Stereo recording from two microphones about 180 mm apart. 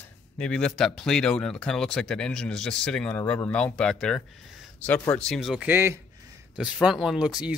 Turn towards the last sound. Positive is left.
turn(degrees=-5)  # may be behind; listen again after turning